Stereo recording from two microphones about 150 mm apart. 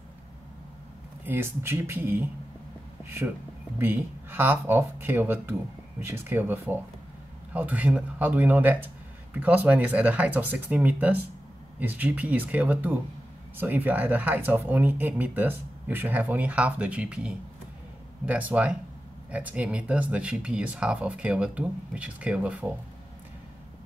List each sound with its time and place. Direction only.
1.2 s speech: 15° right (ahead or behind)
3.0 s a sound: 15° right (ahead or behind)
3.7 s speech: 15° right (ahead or behind)